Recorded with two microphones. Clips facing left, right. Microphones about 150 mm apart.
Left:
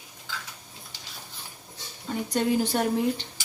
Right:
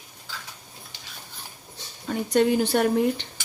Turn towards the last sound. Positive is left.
turn(degrees=-65)  # may be behind; listen again after turning